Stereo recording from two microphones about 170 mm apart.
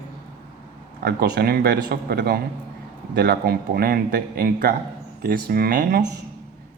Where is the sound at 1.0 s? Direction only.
65° right (ahead or behind).